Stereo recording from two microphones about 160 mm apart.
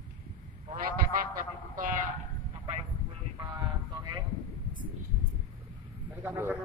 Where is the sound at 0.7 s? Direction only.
60° right (ahead or behind).